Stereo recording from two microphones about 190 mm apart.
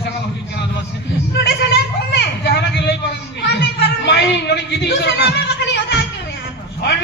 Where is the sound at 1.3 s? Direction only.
60° left (ahead or behind).